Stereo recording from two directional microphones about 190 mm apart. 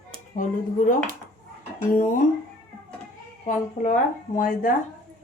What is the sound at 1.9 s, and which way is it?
Speech, 50° left (ahead or behind).